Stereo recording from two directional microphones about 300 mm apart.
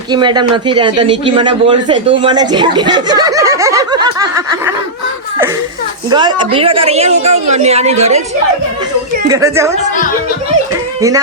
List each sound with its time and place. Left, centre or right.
0.1 s a man's voice: centre
6.1 s a woman's voice: centre
9.3 s a man's voice: centre